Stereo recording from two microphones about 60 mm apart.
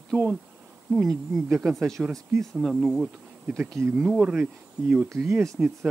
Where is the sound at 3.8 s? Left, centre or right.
Right.